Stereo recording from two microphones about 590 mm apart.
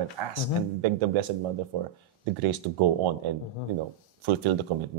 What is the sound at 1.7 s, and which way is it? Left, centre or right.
Speech, right.